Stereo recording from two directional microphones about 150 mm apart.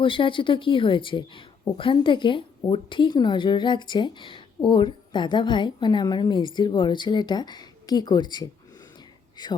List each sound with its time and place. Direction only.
0.0 s a woman's voice: 35° left (ahead or behind)